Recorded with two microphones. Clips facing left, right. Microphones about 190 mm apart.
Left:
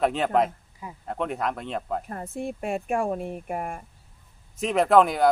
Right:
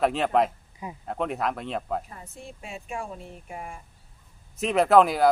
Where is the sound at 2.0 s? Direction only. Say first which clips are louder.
Left 11 dB; 55° left (ahead or behind).